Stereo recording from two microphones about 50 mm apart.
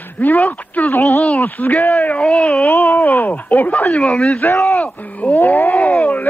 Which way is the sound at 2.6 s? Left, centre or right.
Left.